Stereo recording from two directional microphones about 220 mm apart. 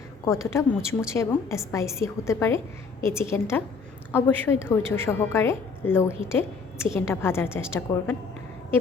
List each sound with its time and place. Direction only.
0.3 s a woman's voice: 15° left (ahead or behind)